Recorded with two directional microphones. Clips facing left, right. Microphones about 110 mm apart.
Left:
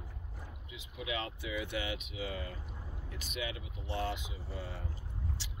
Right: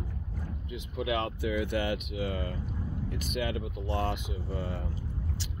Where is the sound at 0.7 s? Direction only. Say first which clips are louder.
Right 8 dB; 55° right (ahead or behind).